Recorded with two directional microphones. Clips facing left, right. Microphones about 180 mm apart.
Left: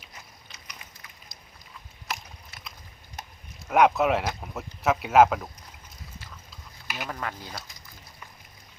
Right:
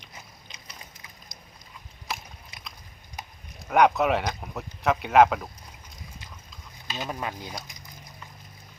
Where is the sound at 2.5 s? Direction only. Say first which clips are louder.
Even; 15° right (ahead or behind).